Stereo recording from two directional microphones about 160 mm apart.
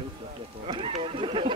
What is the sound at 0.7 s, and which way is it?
Speech, 35° right (ahead or behind).